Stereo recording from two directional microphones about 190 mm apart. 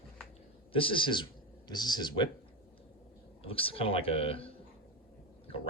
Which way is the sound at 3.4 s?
30° left (ahead or behind).